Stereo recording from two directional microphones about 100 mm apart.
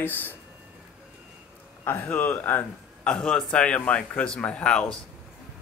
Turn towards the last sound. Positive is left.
turn(degrees=10)  # may be behind; listen again after turning